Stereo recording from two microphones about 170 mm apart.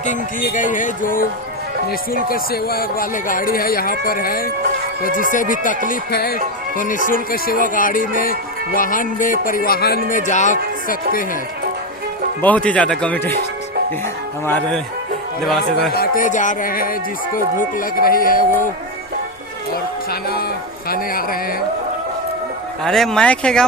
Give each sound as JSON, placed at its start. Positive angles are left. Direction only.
{"t": 0.0, "sound": "speech", "side_deg": 50}
{"t": 2.3, "sound": "speech", "side_deg": 65}
{"t": 6.7, "sound": "speech", "side_deg": 50}
{"t": 12.4, "sound": "speech", "side_deg": 10}
{"t": 14.4, "sound": "speech", "side_deg": 10}
{"t": 15.9, "sound": "speech", "side_deg": 60}
{"t": 20.1, "sound": "speech", "side_deg": 65}
{"t": 22.8, "sound": "speech", "side_deg": 5}